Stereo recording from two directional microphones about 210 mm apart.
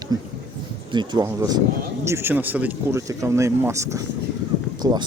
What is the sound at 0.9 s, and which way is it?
Speech, 20° right (ahead or behind).